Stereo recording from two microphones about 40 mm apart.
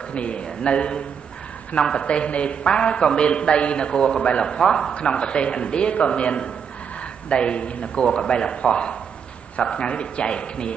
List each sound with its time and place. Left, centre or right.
0.1 s a man's voice: left
4.9 s a man's voice: left